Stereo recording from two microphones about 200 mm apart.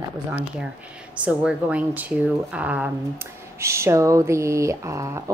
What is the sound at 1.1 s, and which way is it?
Speech, 5° right (ahead or behind).